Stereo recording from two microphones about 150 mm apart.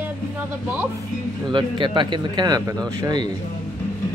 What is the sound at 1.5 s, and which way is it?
A man's voice, 30° right (ahead or behind).